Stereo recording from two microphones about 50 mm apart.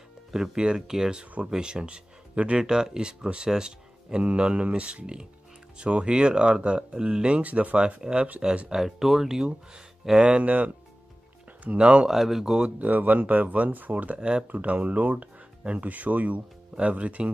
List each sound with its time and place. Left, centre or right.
0.3 s speech: centre
8.6 s speech: centre; by 12.1 s right
12.1 s speech: centre
12.6 s speech: right